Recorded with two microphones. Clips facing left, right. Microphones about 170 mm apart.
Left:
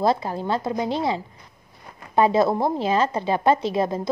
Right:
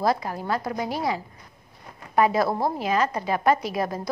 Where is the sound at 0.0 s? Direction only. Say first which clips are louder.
Left 3 dB; 25° left (ahead or behind).